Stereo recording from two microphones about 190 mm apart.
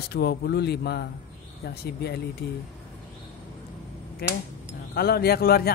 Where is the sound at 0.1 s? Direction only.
60° left (ahead or behind).